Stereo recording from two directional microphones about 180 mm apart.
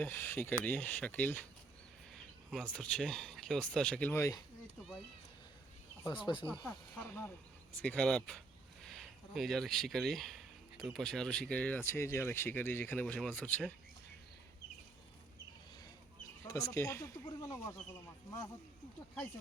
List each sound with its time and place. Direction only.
0.0 s speech: 10° left (ahead or behind)
2.5 s speech: 5° left (ahead or behind)
6.3 s speech: 25° left (ahead or behind)
6.7 s speech: 10° left (ahead or behind)
16.5 s speech: 15° left (ahead or behind)